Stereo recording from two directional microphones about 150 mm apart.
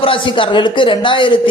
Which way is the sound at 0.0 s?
35° left (ahead or behind).